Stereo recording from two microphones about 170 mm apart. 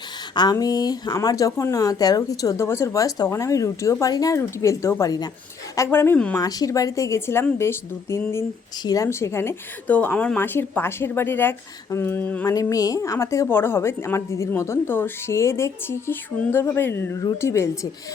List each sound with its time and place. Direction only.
0.3 s a woman's voice: 25° left (ahead or behind)
6.4 s a woman's voice: 20° left (ahead or behind)
12.5 s a woman's voice: 20° left (ahead or behind)